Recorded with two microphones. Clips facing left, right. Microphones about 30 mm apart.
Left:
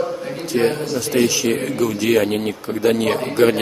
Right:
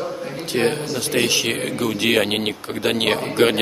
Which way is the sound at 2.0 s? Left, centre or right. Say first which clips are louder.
Left 1 dB; right.